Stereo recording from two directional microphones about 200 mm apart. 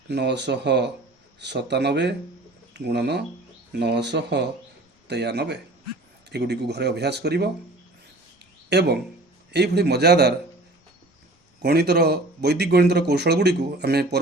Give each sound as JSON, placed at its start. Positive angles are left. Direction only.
{"t": 0.1, "sound": "speech", "side_deg": -60}
{"t": 8.7, "sound": "speech", "side_deg": -55}
{"t": 11.6, "sound": "speech", "side_deg": -55}